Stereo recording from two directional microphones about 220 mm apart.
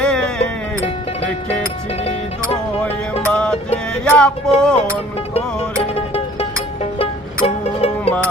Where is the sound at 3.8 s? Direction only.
5° left (ahead or behind).